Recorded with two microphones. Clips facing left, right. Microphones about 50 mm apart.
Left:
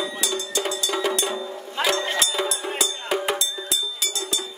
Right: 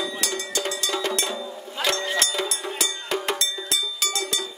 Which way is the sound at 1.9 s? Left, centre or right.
Left.